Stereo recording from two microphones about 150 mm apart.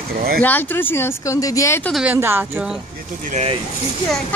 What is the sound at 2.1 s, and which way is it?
Speech, 15° right (ahead or behind).